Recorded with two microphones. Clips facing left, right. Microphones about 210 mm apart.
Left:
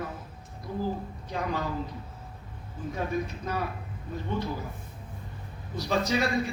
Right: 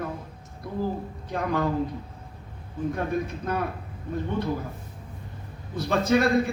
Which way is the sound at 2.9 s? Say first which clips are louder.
Right 2 dB; 55° right (ahead or behind).